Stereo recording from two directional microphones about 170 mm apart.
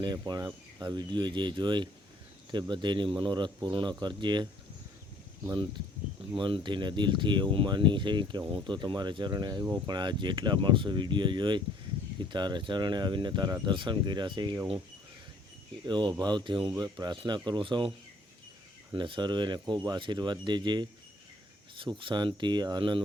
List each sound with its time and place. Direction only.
0.0 s speech: 25° right (ahead or behind)
6.3 s speech: 30° right (ahead or behind)
15.9 s speech: 25° right (ahead or behind)
18.9 s speech: 30° right (ahead or behind)